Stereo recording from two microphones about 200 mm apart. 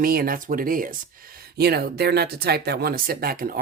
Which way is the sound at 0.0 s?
50° right (ahead or behind).